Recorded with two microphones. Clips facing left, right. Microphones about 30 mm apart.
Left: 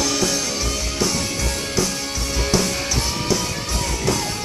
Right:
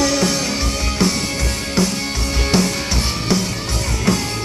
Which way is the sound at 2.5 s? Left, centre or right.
Right.